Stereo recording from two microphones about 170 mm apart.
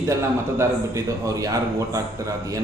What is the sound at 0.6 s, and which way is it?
Speech, 20° right (ahead or behind).